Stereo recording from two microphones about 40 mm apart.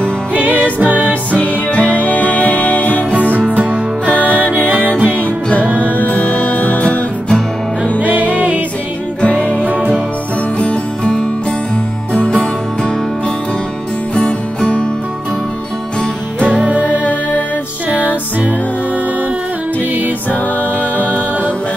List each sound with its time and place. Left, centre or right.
0.7 s music: right
1.4 s music: left
3.1 s music: right
4.0 s music: left
4.6 s music: right
5.8 s music: left
8.0 s music: right
9.2 s music: left
14.1 s music: left
16.5 s music: right